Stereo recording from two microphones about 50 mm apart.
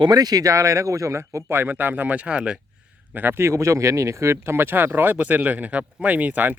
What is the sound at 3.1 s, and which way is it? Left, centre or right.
Speech, right.